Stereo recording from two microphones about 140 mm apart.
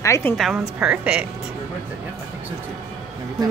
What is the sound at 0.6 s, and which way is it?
Speech, 5° right (ahead or behind).